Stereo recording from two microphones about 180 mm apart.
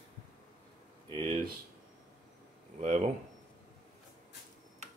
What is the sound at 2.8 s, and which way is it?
Speech, 45° right (ahead or behind).